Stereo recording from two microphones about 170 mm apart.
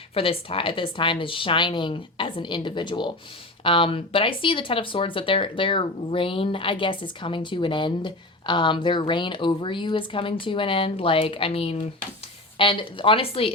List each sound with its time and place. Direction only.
0.1 s a woman's voice: 35° left (ahead or behind)